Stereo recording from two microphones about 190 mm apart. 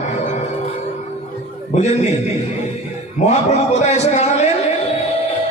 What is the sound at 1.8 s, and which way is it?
Speech, 35° left (ahead or behind).